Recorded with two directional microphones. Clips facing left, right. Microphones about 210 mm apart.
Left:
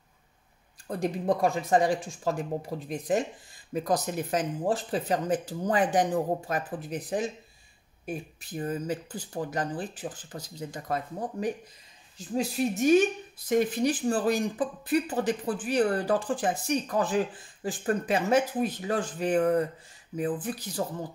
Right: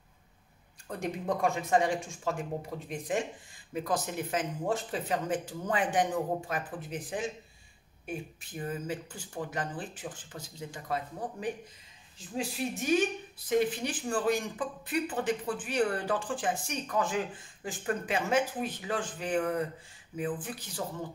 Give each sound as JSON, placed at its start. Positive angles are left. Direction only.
{"t": 0.8, "sound": "speech", "side_deg": 35}
{"t": 13.5, "sound": "speech", "side_deg": 40}